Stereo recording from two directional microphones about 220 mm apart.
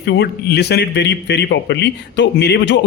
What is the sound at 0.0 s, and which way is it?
Speech, 50° left (ahead or behind).